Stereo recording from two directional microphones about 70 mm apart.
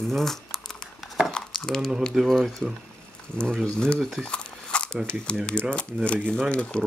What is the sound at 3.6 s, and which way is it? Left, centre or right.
Speech, centre.